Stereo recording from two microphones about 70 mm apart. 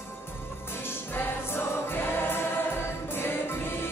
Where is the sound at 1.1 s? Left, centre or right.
Left.